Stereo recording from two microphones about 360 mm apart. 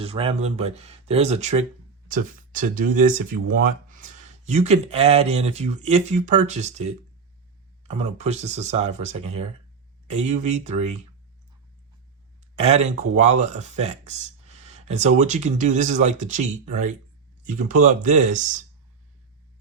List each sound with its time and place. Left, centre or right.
0.0 s speech: centre
12.5 s speech: centre